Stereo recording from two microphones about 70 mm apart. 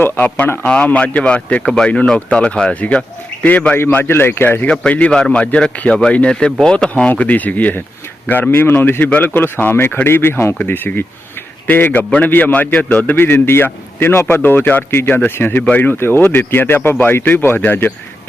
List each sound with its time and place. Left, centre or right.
0.0 s speech: left
1.6 s speech: centre
3.9 s speech: left
4.7 s a man's voice: centre